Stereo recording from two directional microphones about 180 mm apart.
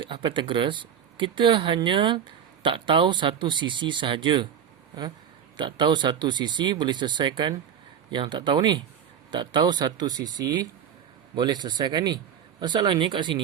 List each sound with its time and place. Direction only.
0.0 s speech: 25° right (ahead or behind)
5.5 s speech: 25° right (ahead or behind)